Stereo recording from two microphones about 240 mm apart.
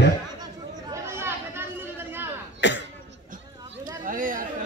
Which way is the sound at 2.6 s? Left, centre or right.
Left.